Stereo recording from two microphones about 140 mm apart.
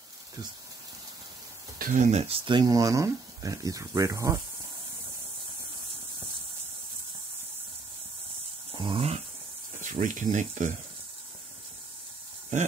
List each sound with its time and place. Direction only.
1.8 s speech: 70° right (ahead or behind); by 4.4 s 25° right (ahead or behind)
8.7 s a sound: 40° right (ahead or behind)
9.8 s speech: 65° right (ahead or behind)